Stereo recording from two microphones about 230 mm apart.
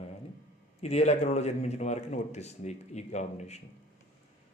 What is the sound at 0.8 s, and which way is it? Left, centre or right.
Speech, left.